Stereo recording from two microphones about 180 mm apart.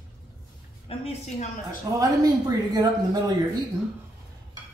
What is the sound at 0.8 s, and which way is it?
Speech, 35° left (ahead or behind).